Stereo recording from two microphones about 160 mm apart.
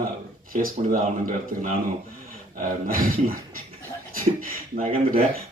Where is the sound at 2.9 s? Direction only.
60° right (ahead or behind).